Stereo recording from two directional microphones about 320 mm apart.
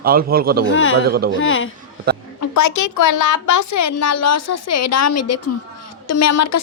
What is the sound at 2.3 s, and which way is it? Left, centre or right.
A child's voice, left.